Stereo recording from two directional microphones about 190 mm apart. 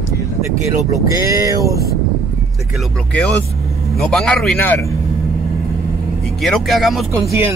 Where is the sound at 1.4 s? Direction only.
15° right (ahead or behind).